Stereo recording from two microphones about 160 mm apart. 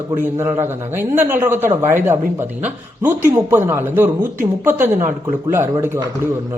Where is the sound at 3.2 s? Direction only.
15° right (ahead or behind).